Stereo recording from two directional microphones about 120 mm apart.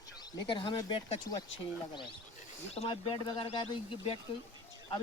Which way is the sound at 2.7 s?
60° left (ahead or behind).